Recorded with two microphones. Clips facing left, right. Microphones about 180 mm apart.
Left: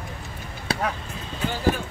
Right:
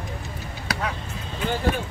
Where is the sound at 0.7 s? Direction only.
30° left (ahead or behind).